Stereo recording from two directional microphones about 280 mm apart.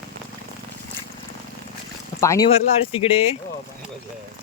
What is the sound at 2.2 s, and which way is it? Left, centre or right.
Speech, centre.